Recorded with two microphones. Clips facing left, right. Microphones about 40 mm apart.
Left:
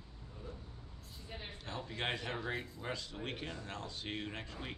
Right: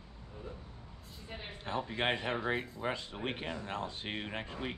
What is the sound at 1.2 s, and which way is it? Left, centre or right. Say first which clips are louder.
Speech: right 5 dB; centre.